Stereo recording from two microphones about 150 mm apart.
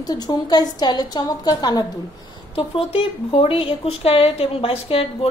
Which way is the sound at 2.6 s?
40° left (ahead or behind).